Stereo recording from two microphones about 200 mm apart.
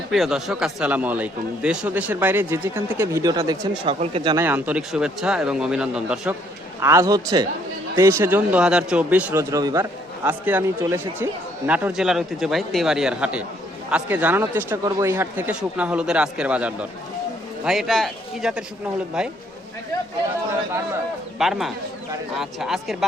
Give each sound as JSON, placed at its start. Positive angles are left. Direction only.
{"t": 0.1, "sound": "a man's voice", "side_deg": 0}
{"t": 4.4, "sound": "a man's voice", "side_deg": -10}
{"t": 21.3, "sound": "speech", "side_deg": 0}